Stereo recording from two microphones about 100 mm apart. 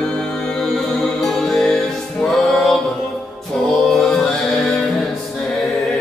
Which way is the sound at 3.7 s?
Centre (ahead or behind).